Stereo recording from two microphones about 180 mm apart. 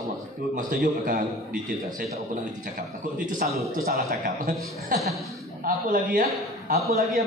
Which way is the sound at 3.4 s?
55° right (ahead or behind).